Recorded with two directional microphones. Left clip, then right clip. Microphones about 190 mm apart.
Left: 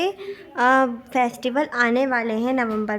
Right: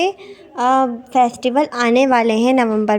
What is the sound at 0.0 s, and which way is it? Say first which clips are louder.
A woman's voice: right 5 dB; 10° right (ahead or behind).